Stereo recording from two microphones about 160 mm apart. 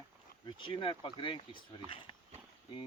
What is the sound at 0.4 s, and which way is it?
Speech, 30° left (ahead or behind).